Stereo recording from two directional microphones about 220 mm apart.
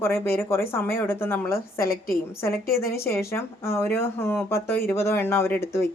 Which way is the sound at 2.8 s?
10° left (ahead or behind).